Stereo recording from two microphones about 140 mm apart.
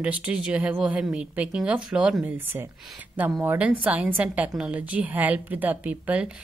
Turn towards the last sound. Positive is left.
turn(degrees=-10)  # may be behind; listen again after turning